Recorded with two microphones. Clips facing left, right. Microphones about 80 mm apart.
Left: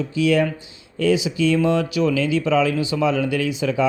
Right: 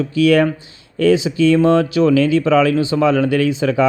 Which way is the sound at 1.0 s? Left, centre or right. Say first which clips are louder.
Right 5 dB; right.